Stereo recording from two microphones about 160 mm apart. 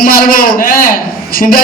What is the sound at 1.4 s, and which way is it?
Speech, 50° left (ahead or behind).